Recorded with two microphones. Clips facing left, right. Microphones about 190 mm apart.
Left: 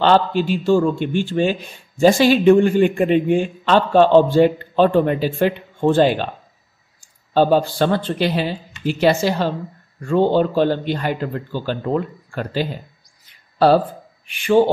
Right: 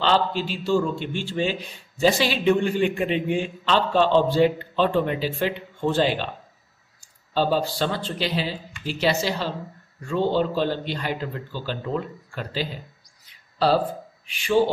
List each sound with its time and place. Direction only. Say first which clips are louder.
0.0 s a man's voice: left 6 dB; 55° left (ahead or behind)
7.3 s a man's voice: left 7 dB; 55° left (ahead or behind)
14.2 s speech: left 5 dB; 55° left (ahead or behind)